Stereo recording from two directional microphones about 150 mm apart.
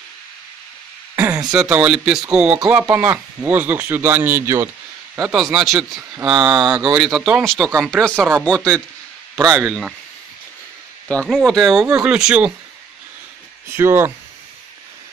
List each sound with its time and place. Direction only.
1.1 s a sound: 15° right (ahead or behind)
1.5 s speech: 5° right (ahead or behind)
5.3 s speech: centre (ahead or behind)
11.2 s speech: 5° left (ahead or behind)
13.7 s speech: 15° right (ahead or behind)